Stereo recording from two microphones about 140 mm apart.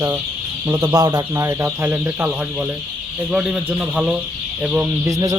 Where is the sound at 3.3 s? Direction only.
10° right (ahead or behind).